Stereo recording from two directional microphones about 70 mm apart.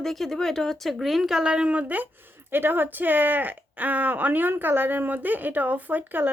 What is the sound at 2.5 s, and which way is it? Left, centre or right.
Speech, right.